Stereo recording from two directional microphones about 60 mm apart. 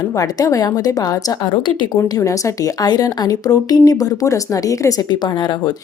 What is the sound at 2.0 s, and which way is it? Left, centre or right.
A woman's voice, left.